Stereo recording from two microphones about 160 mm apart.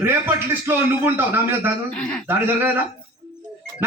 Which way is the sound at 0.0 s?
15° right (ahead or behind).